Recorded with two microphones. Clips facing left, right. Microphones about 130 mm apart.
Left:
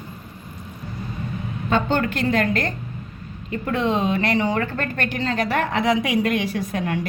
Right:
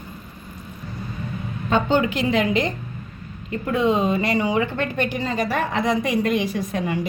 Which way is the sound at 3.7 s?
5° right (ahead or behind).